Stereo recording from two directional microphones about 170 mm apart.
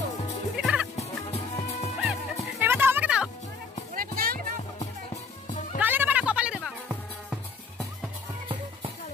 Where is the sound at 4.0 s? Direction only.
60° right (ahead or behind).